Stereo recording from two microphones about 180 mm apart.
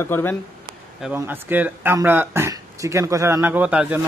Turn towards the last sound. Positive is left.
turn(degrees=-5)  # may be behind; listen again after turning